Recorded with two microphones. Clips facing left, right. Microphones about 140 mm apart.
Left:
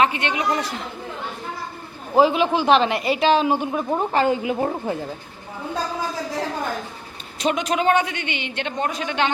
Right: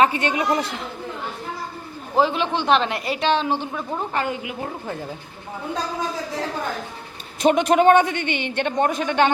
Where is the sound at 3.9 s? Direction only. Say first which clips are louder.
Left 6 dB; 25° left (ahead or behind).